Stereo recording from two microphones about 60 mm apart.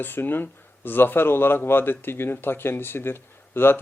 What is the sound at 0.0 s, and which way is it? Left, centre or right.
A man's voice, left.